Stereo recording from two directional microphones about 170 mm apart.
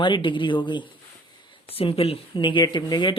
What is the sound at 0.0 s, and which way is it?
Speech, 30° left (ahead or behind).